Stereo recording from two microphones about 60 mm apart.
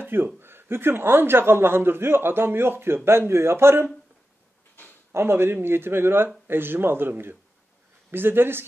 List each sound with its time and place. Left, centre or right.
0.0 s a sound: right
0.4 s a man's voice: right
5.1 s a man's voice: right